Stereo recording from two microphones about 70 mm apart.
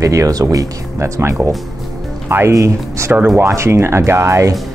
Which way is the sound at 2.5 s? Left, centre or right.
Right.